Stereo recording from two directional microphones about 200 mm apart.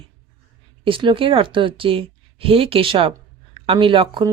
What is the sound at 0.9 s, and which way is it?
Speech, 25° right (ahead or behind).